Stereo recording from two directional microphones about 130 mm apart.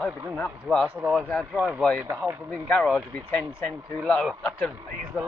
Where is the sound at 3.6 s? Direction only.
15° left (ahead or behind).